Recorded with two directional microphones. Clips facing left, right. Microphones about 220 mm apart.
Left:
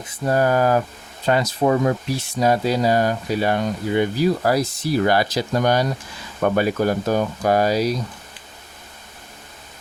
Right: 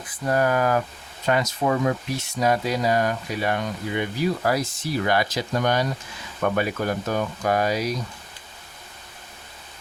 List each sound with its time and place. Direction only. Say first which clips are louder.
0.0 s speech: left 3 dB; 25° left (ahead or behind)